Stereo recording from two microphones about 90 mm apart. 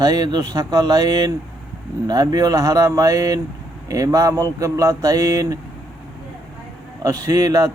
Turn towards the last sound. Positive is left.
turn(degrees=-35)  # may be behind; listen again after turning